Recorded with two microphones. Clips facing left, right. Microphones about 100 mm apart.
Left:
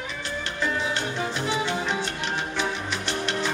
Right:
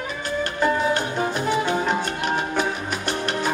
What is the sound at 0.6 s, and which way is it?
Music, 50° right (ahead or behind).